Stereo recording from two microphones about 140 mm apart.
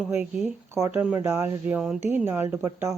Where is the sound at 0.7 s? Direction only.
15° right (ahead or behind).